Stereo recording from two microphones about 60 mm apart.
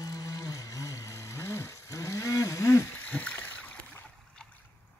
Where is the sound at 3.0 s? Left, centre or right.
Left.